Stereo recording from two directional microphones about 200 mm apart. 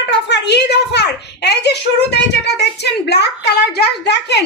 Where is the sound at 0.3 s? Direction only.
60° left (ahead or behind).